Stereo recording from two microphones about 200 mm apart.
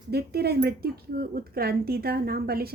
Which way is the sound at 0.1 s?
50° right (ahead or behind).